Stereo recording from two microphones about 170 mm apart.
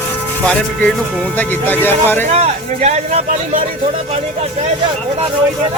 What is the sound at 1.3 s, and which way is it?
Speech, 10° left (ahead or behind).